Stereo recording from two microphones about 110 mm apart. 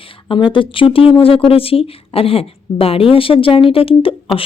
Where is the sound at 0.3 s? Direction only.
50° left (ahead or behind).